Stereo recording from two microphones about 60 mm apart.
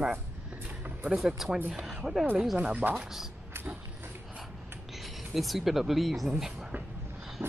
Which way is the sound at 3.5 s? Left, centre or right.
Right.